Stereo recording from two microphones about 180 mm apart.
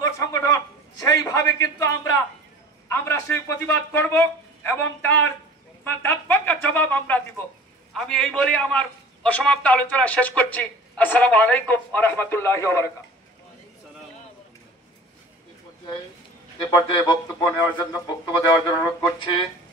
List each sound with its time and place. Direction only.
0.0 s a man's voice: 20° left (ahead or behind)
16.7 s speech: 25° left (ahead or behind)